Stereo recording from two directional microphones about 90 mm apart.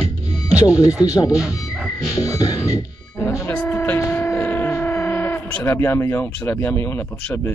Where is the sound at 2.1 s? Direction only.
35° left (ahead or behind).